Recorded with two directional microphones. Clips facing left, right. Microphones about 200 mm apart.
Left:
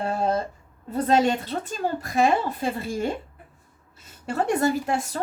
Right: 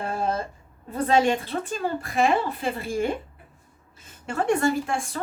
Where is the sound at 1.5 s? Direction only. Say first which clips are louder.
Even; 40° left (ahead or behind).